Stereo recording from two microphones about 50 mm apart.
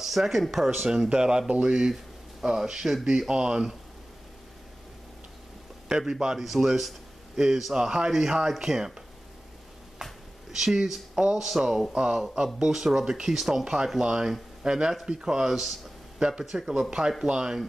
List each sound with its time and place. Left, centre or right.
0.0 s speech: centre
0.8 s speech: centre
5.9 s speech: centre
10.5 s speech: centre
16.2 s speech: centre